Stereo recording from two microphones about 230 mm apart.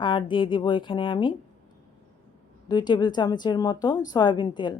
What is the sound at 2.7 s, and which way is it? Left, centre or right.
A woman's voice, centre.